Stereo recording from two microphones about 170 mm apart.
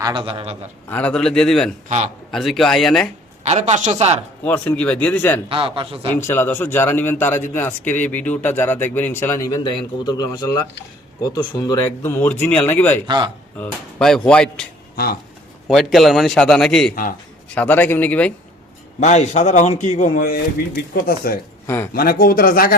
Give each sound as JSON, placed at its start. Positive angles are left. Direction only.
{"t": 0.0, "sound": "a man's voice", "side_deg": -30}
{"t": 0.9, "sound": "a man's voice", "side_deg": 10}
{"t": 3.4, "sound": "speech", "side_deg": -40}
{"t": 4.4, "sound": "speech", "side_deg": 10}
{"t": 5.5, "sound": "speech", "side_deg": -30}
{"t": 6.1, "sound": "speech", "side_deg": 15}
{"t": 13.1, "sound": "a man's voice", "side_deg": -25}
{"t": 13.6, "sound": "a man's voice", "side_deg": 5}
{"t": 15.6, "sound": "a man's voice", "side_deg": 0}
{"t": 18.9, "sound": "a man's voice", "side_deg": 45}